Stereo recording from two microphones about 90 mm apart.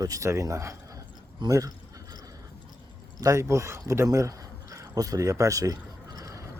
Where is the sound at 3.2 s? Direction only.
35° right (ahead or behind).